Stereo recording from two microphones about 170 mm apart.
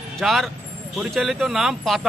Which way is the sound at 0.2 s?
Centre (ahead or behind).